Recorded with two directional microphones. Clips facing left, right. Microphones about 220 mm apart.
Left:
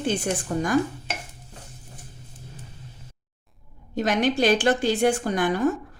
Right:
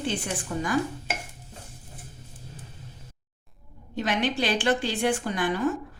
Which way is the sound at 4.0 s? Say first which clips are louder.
Left 5 dB; 45° left (ahead or behind).